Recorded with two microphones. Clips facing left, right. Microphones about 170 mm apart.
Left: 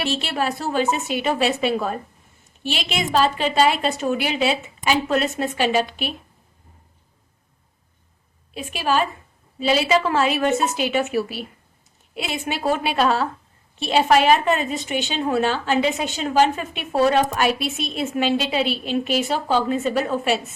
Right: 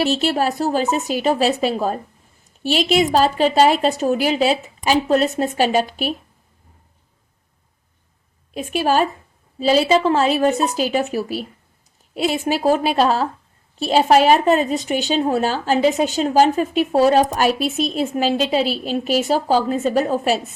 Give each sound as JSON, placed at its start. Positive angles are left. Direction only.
{"t": 0.0, "sound": "a woman's voice", "side_deg": -40}
{"t": 8.5, "sound": "a woman's voice", "side_deg": -45}